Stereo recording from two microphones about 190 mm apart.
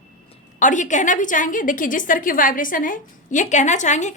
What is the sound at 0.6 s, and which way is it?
A woman's voice, 40° left (ahead or behind).